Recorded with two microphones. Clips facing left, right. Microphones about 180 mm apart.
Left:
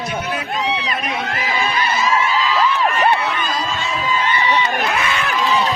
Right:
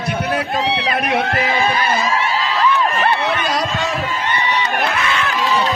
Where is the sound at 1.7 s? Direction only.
50° right (ahead or behind).